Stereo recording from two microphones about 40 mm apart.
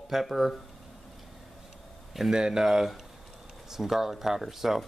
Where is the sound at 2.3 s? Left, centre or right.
Centre.